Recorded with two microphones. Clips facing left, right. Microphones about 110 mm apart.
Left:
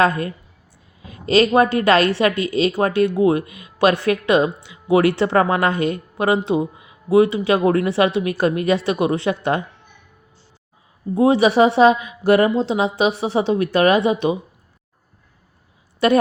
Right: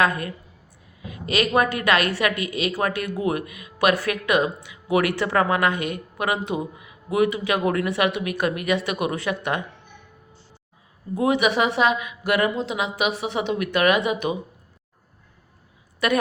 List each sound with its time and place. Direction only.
0.0 s a woman's voice: 30° left (ahead or behind)
11.1 s a woman's voice: 30° left (ahead or behind)
16.0 s a woman's voice: 30° left (ahead or behind)